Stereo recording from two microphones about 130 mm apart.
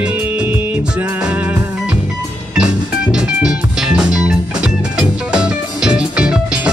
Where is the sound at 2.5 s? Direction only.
5° right (ahead or behind).